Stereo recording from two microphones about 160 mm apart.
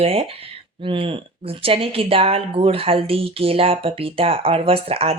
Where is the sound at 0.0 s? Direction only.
40° right (ahead or behind).